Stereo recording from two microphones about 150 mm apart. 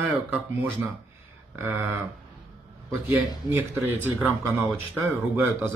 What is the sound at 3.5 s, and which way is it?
Speech, 15° right (ahead or behind).